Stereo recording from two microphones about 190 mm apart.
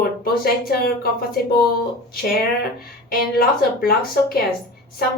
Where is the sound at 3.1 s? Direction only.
50° left (ahead or behind).